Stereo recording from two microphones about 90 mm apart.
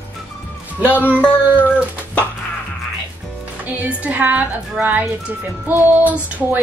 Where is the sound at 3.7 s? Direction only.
15° right (ahead or behind).